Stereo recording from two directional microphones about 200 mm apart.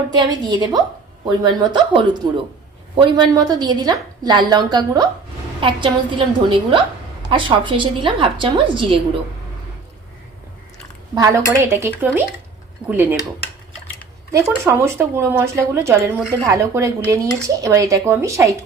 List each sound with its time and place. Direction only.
0.1 s a woman's voice: 20° right (ahead or behind)
11.1 s speech: 15° right (ahead or behind)
14.3 s speech: 15° right (ahead or behind)